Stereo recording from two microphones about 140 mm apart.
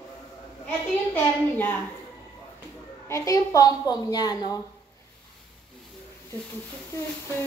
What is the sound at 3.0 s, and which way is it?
A woman's voice, 20° left (ahead or behind).